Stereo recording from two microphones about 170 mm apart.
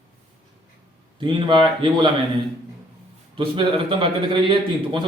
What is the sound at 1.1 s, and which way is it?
Speech, 30° right (ahead or behind).